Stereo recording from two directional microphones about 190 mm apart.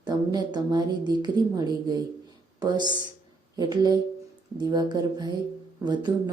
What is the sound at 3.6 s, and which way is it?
A woman's voice, 20° right (ahead or behind).